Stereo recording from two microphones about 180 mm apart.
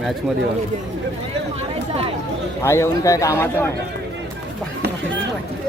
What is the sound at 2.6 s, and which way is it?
A man's voice, 15° left (ahead or behind).